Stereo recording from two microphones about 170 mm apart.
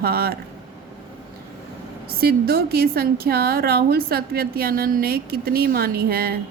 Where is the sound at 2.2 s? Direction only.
65° right (ahead or behind).